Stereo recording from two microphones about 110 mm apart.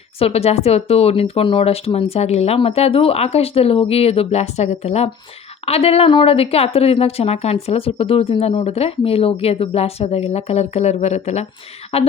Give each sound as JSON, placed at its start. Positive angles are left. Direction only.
{"t": 0.2, "sound": "speech", "side_deg": 65}
{"t": 5.6, "sound": "speech", "side_deg": 65}
{"t": 11.9, "sound": "speech", "side_deg": 65}